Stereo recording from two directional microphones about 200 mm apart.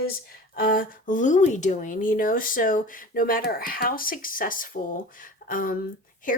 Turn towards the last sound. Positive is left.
turn(degrees=40)  # may be behind; listen again after turning